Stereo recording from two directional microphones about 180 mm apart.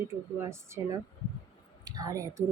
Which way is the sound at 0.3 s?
15° right (ahead or behind).